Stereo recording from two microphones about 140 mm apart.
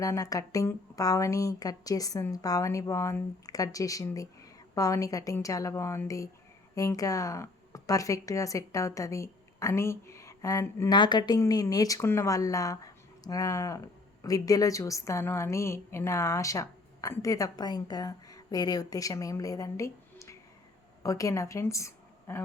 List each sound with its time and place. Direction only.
0.0 s a woman's voice: 25° left (ahead or behind)